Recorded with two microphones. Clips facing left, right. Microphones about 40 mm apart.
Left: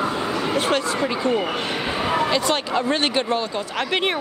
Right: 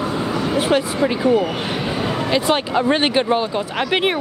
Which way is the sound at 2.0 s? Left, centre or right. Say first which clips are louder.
Left 4 dB; centre.